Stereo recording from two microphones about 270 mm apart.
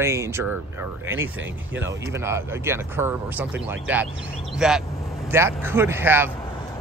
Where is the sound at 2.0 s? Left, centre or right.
Centre.